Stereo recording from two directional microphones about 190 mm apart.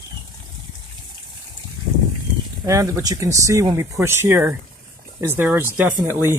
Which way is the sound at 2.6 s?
15° right (ahead or behind).